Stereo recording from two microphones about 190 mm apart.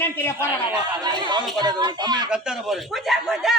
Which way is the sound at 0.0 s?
10° left (ahead or behind).